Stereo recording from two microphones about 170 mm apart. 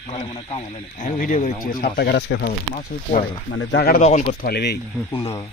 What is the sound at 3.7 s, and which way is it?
Speech, 65° left (ahead or behind).